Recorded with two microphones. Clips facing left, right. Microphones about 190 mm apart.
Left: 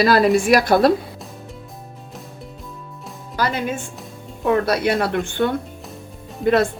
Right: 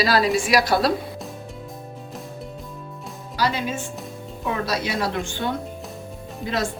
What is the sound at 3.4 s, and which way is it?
Speech, 55° left (ahead or behind).